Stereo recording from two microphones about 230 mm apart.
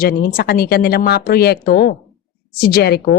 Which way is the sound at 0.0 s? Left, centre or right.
Left.